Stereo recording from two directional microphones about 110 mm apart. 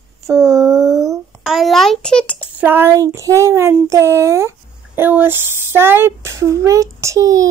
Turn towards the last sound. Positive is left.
turn(degrees=-30)  # may be behind; listen again after turning